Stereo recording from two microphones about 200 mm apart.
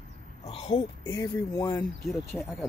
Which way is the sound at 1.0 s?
15° left (ahead or behind).